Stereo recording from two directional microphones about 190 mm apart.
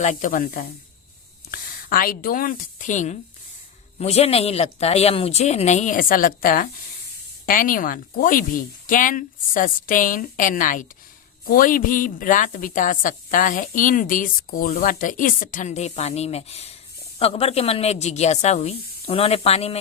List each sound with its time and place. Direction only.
0.0 s a woman's voice: 40° left (ahead or behind)